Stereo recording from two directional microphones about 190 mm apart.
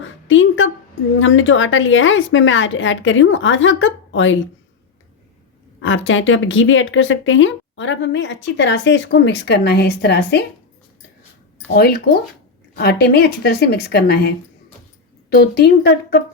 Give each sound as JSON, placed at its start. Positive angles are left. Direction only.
{"t": 0.0, "sound": "a sound", "side_deg": 90}
{"t": 1.2, "sound": "a woman's voice", "side_deg": 90}
{"t": 5.8, "sound": "speech", "side_deg": 90}
{"t": 11.7, "sound": "speech", "side_deg": 55}